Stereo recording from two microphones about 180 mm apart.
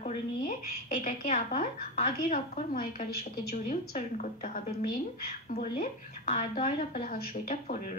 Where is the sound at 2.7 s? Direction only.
50° left (ahead or behind).